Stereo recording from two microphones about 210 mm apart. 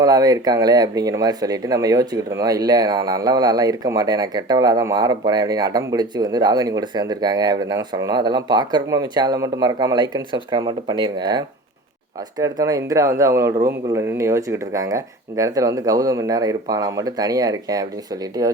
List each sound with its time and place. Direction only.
0.0 s speech: 15° right (ahead or behind)